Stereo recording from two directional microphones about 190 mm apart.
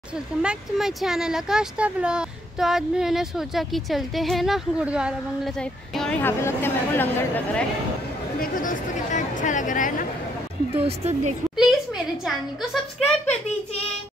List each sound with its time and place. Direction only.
0.4 s speech: 5° right (ahead or behind)
8.4 s speech: 45° left (ahead or behind)
10.7 s speech: 30° right (ahead or behind)
11.5 s a sound: centre (ahead or behind)